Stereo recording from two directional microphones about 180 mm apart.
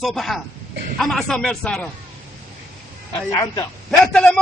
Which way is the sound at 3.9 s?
5° left (ahead or behind).